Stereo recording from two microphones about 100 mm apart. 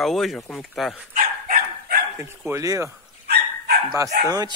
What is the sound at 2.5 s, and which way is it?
Speech, 30° right (ahead or behind).